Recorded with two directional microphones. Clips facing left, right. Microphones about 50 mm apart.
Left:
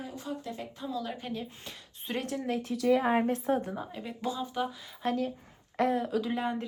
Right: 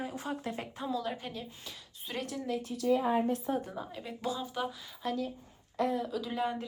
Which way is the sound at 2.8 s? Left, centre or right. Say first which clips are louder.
Left 3 dB; left.